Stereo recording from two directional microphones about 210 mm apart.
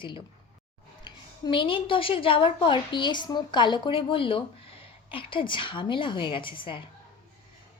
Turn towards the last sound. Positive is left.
turn(degrees=25)  # may be behind; listen again after turning